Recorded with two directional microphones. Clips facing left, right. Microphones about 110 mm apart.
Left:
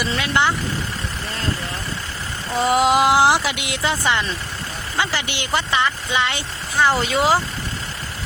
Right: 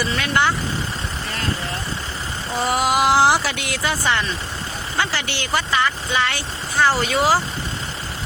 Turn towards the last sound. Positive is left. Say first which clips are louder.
# even
turn(degrees=20)  # may be behind; listen again after turning